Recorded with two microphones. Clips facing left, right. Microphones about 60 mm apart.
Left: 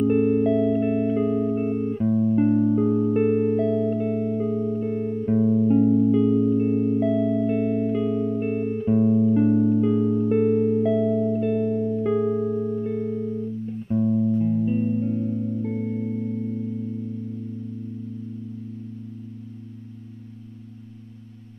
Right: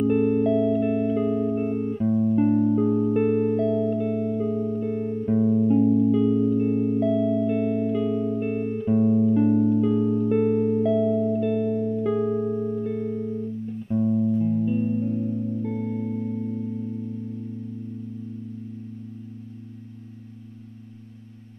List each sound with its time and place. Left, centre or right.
0.0 s music: centre
5.9 s music: centre
14.4 s music: centre